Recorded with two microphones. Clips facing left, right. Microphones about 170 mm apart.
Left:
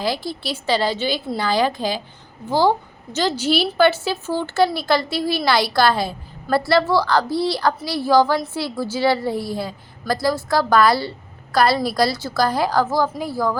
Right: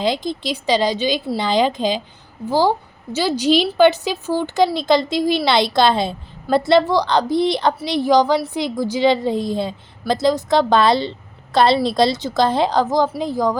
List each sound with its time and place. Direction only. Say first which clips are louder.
0.0 s a woman's voice: right 3 dB; 20° right (ahead or behind)